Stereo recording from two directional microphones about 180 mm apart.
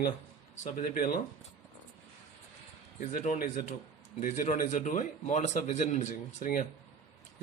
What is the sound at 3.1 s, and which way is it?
Speech, 45° left (ahead or behind).